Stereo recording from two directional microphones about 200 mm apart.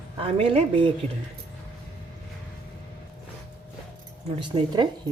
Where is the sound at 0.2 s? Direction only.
30° right (ahead or behind).